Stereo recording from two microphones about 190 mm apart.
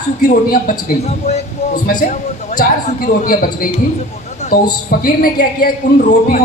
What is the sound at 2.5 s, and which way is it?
A man's voice, 50° left (ahead or behind).